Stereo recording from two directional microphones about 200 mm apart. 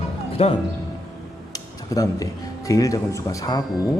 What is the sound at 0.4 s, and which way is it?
Speech, 30° left (ahead or behind).